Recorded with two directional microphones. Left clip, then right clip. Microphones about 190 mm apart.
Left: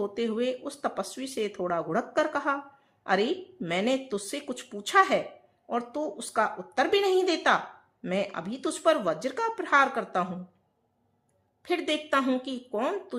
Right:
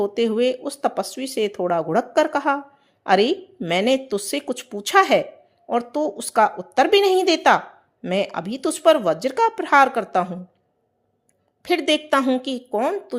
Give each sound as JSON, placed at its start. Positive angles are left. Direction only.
{"t": 0.0, "sound": "speech", "side_deg": -30}
{"t": 11.6, "sound": "speech", "side_deg": -35}